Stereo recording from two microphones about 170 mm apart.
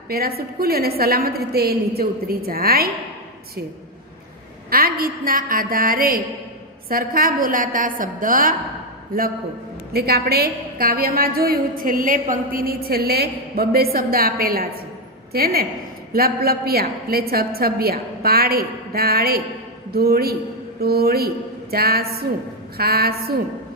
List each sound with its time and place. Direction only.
0.1 s a woman's voice: 65° right (ahead or behind)
4.7 s a woman's voice: 60° right (ahead or behind)